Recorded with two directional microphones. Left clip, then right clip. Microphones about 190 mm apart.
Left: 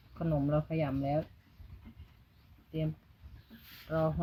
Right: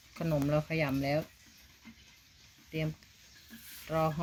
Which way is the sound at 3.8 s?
20° right (ahead or behind).